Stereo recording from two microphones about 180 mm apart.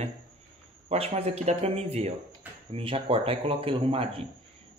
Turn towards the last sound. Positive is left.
turn(degrees=-30)  # may be behind; listen again after turning